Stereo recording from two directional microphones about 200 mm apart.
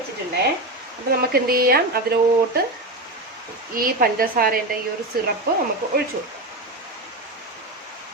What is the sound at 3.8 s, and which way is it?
Speech, 45° right (ahead or behind).